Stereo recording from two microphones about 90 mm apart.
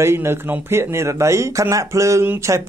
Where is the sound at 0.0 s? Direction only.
30° right (ahead or behind).